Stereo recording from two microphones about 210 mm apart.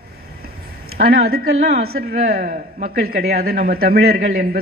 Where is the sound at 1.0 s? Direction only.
45° right (ahead or behind).